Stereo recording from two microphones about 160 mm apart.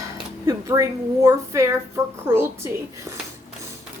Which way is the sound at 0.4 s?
20° right (ahead or behind).